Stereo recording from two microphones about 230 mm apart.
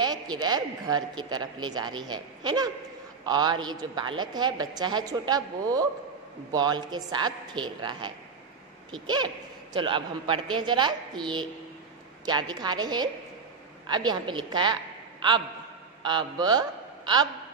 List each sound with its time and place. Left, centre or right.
0.0 s a woman's voice: centre
16.0 s a man's voice: centre